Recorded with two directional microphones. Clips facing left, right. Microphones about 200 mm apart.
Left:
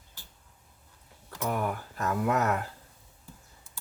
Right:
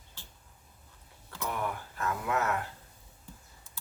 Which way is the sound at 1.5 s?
45° left (ahead or behind).